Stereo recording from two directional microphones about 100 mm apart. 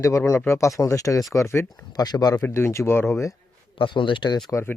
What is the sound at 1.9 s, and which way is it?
Speech, 40° left (ahead or behind).